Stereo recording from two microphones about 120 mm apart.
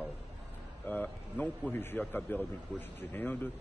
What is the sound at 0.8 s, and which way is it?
A man's voice, 15° left (ahead or behind).